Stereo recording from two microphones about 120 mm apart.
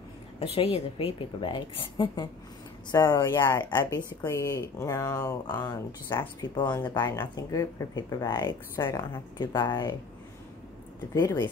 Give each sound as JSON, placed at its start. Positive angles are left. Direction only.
{"t": 0.7, "sound": "a woman's voice", "side_deg": 50}
{"t": 11.1, "sound": "speech", "side_deg": 30}